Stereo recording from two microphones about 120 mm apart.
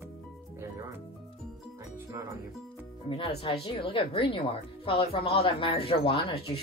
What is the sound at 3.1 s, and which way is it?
Music, 50° left (ahead or behind).